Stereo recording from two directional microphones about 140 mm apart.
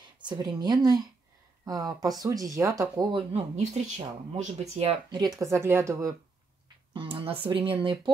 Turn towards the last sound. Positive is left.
turn(degrees=-40)  # may be behind; listen again after turning